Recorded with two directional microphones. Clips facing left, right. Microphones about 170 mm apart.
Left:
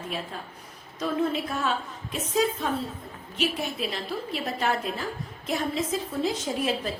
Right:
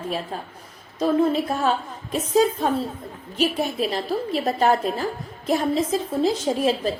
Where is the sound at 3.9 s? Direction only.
40° right (ahead or behind).